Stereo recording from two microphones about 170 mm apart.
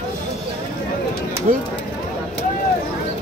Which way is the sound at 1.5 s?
55° right (ahead or behind).